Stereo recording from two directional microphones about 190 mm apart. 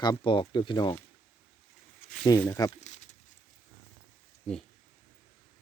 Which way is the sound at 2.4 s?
15° left (ahead or behind).